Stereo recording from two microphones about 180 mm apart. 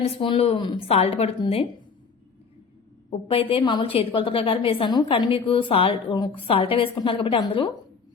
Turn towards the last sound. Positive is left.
turn(degrees=25)  # may be behind; listen again after turning